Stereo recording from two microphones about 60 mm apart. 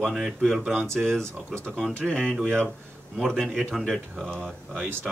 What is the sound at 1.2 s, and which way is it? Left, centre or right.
Speech, right.